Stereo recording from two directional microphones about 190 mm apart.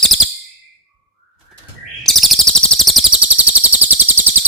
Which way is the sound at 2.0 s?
Centre (ahead or behind).